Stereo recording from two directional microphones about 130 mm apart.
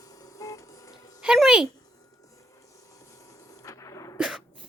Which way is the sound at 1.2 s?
5° right (ahead or behind).